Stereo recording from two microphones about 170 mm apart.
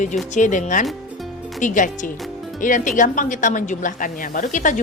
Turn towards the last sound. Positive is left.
turn(degrees=50)  # may be behind; listen again after turning